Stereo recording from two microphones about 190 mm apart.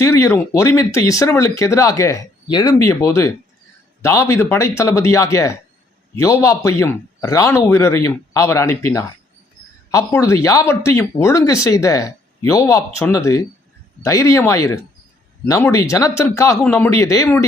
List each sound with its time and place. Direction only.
0.0 s speech: 15° left (ahead or behind)